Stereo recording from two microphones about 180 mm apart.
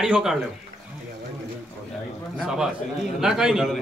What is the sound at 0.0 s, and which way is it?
Speech, 5° right (ahead or behind).